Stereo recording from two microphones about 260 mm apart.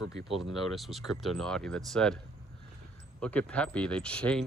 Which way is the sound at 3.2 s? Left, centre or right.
Centre.